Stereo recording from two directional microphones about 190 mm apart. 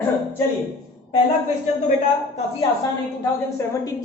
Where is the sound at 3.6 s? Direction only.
15° left (ahead or behind).